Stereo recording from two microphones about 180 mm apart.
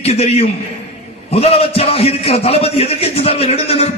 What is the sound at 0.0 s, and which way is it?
A man's voice, 35° left (ahead or behind).